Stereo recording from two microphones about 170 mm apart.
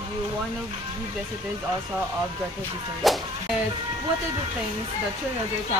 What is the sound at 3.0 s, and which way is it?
Speech, centre (ahead or behind).